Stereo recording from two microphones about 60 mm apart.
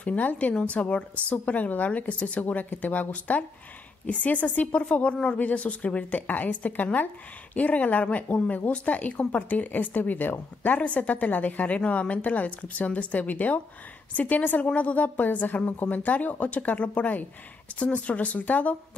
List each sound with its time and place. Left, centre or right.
0.0 s speech: left